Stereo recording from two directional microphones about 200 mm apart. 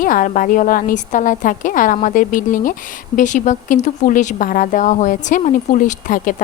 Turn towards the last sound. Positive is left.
turn(degrees=40)  # may be behind; listen again after turning